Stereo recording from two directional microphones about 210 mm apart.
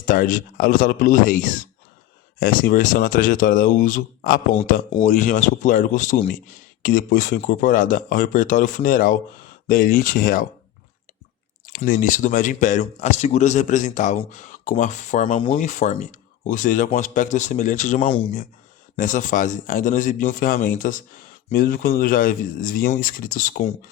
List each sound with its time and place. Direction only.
0.0 s speech: 40° left (ahead or behind)
11.6 s speech: 40° left (ahead or behind)